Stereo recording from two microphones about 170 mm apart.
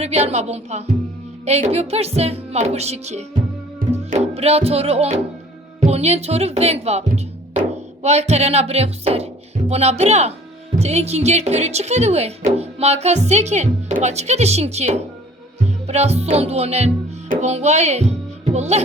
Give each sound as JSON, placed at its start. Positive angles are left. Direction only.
{"t": 0.3, "sound": "speech", "side_deg": -40}
{"t": 3.9, "sound": "music", "side_deg": -40}
{"t": 5.8, "sound": "speech", "side_deg": -40}
{"t": 8.0, "sound": "speech", "side_deg": -40}